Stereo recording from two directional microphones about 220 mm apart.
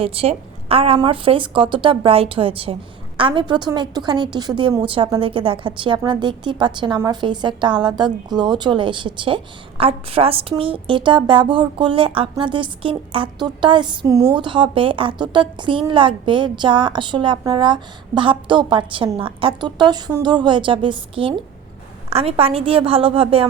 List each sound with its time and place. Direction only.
0.0 s a woman's voice: 25° right (ahead or behind)